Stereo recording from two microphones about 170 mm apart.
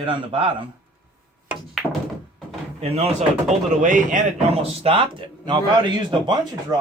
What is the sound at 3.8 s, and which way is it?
A man's voice, 50° right (ahead or behind).